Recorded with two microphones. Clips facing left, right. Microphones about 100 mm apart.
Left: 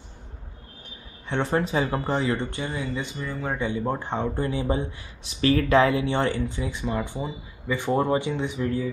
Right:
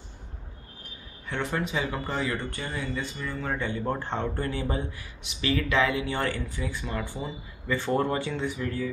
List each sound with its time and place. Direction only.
1.3 s speech: 35° left (ahead or behind)
5.2 s speech: 35° left (ahead or behind); by 8.8 s 20° left (ahead or behind)